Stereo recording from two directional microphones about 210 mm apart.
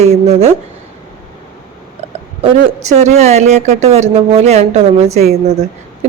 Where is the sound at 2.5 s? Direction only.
35° right (ahead or behind).